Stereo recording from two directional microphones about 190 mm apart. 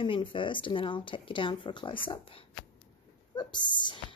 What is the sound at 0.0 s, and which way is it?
Speech, 25° left (ahead or behind).